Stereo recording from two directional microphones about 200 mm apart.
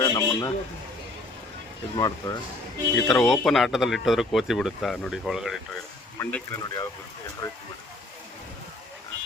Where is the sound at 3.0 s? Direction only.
Centre (ahead or behind).